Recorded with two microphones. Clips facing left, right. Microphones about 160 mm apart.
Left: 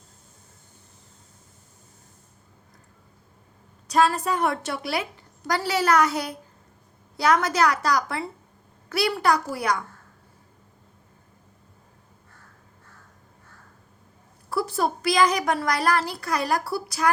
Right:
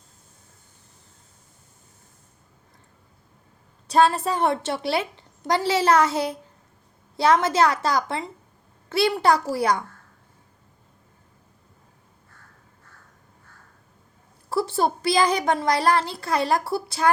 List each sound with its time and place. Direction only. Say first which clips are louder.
3.8 s a woman's voice: right 2 dB; 30° right (ahead or behind)
14.5 s a woman's voice: right 2 dB; 25° right (ahead or behind)